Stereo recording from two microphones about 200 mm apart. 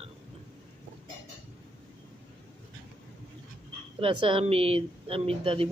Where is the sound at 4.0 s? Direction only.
25° right (ahead or behind).